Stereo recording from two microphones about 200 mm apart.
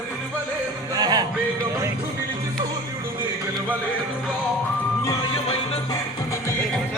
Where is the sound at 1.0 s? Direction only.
20° right (ahead or behind).